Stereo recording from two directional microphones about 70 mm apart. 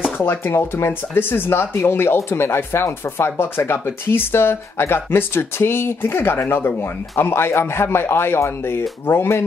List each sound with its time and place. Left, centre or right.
0.2 s speech: left